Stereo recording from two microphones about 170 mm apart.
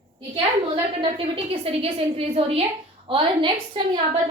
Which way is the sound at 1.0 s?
35° right (ahead or behind).